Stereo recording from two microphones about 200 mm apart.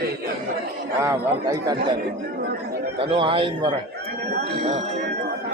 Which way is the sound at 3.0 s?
25° right (ahead or behind).